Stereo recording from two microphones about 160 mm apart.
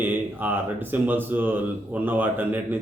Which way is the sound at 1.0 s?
10° right (ahead or behind).